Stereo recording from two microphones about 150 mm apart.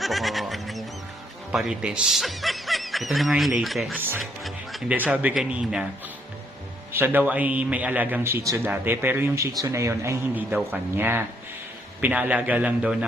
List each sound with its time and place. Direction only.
0.0 s music: centre (ahead or behind)
1.5 s speech: 5° right (ahead or behind)
3.9 s a man's voice: 15° right (ahead or behind)
4.2 s a man's voice: centre (ahead or behind)
6.9 s a man's voice: 15° right (ahead or behind)